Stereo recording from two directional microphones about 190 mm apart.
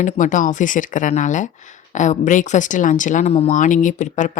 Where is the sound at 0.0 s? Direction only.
40° left (ahead or behind).